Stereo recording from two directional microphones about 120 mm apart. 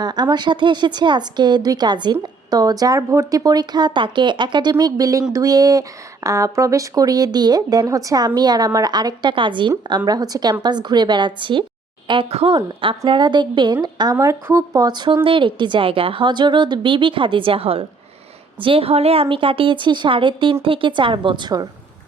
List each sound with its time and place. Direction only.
0.0 s speech: 35° right (ahead or behind)
10.1 s a woman's voice: 30° right (ahead or behind)